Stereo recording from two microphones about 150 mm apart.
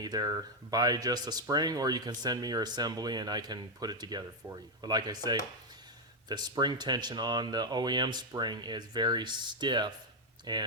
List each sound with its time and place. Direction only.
0.0 s speech: 25° right (ahead or behind)